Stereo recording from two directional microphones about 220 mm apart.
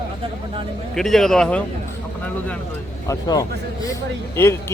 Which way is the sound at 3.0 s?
15° left (ahead or behind).